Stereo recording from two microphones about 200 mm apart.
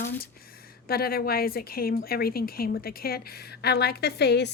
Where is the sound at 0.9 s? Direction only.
50° left (ahead or behind).